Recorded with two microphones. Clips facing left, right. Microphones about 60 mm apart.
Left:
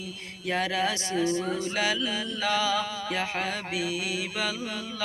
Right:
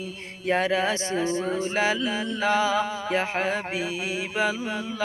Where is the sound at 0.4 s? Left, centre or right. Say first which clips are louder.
Right 4 dB; right.